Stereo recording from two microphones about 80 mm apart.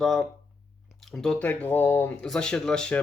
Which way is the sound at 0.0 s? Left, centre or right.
Centre.